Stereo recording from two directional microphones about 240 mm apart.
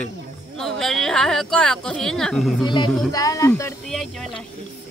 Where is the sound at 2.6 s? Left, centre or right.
Centre.